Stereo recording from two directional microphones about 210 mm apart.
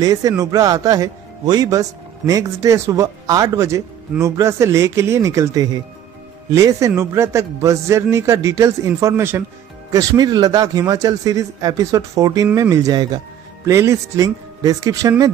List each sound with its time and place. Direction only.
0.0 s a man's voice: 15° right (ahead or behind)